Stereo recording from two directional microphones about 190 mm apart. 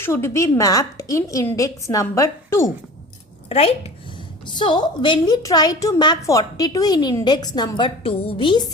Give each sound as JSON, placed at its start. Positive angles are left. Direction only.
{"t": 0.0, "sound": "a woman's voice", "side_deg": 15}
{"t": 3.5, "sound": "a woman's voice", "side_deg": 30}